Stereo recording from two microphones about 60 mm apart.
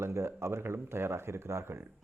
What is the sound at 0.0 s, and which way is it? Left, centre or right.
Speech, right.